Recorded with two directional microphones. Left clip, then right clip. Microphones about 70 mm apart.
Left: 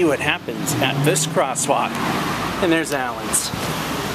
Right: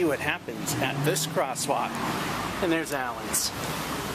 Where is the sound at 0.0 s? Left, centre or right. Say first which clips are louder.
Left 8 dB; centre.